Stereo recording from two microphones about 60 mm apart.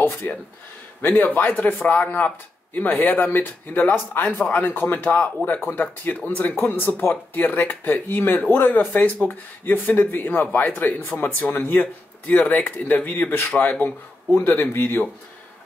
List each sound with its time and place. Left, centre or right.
0.0 s speech: left